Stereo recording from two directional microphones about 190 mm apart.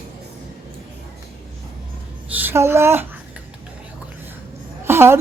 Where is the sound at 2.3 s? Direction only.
10° right (ahead or behind).